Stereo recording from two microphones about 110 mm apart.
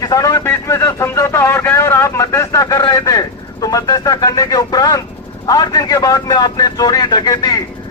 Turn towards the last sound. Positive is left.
turn(degrees=35)  # may be behind; listen again after turning